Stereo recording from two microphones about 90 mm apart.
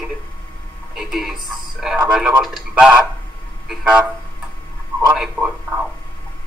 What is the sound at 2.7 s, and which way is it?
Speech, 15° right (ahead or behind).